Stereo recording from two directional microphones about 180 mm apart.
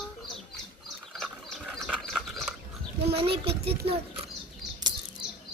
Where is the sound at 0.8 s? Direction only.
Centre (ahead or behind).